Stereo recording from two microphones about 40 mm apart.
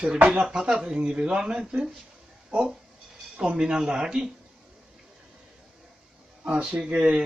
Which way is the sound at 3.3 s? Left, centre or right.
Right.